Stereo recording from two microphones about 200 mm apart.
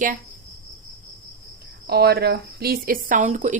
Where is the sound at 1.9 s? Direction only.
55° right (ahead or behind); by 3.6 s 35° right (ahead or behind).